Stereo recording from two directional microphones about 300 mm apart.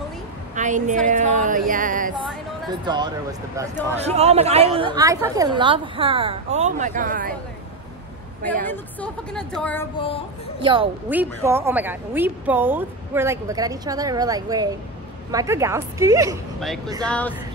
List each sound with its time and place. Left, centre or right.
0.6 s a woman's voice: right
2.8 s a woman's voice: centre
8.6 s speech: centre
9.9 s a sound: centre
10.6 s a woman's voice: centre
16.5 s speech: centre